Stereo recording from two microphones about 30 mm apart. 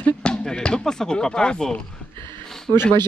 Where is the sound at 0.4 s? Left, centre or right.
Left.